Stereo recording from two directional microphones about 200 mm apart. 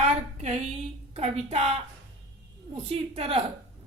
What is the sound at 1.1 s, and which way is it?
Speech, 30° right (ahead or behind).